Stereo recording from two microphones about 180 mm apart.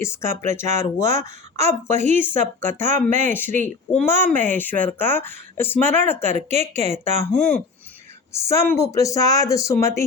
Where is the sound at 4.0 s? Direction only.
10° left (ahead or behind).